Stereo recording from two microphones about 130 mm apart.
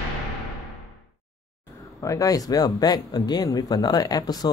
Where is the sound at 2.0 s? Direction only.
25° left (ahead or behind).